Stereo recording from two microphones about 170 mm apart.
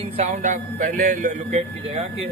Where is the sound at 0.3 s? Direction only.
45° right (ahead or behind).